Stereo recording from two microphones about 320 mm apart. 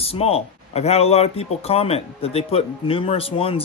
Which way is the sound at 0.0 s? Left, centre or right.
Centre.